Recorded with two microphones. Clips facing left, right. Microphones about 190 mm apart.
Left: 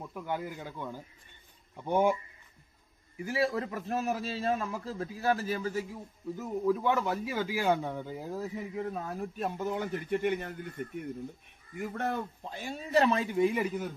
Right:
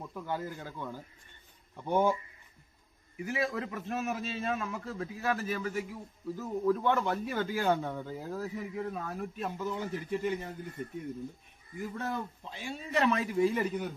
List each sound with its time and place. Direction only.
0.0 s a man's voice: 10° left (ahead or behind)
3.2 s a man's voice: 30° left (ahead or behind)
6.3 s a man's voice: 15° left (ahead or behind); by 9.1 s 30° left (ahead or behind)
9.4 s a man's voice: 55° left (ahead or behind); by 13.6 s 20° left (ahead or behind)
13.6 s speech: centre (ahead or behind)